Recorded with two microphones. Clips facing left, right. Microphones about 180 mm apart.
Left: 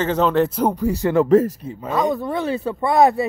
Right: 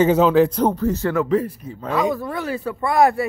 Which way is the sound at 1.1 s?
40° left (ahead or behind).